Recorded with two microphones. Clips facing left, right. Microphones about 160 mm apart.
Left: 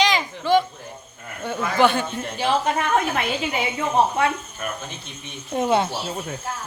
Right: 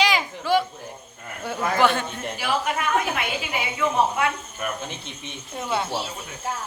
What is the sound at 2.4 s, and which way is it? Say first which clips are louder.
Speech: left 4 dB; 35° left (ahead or behind).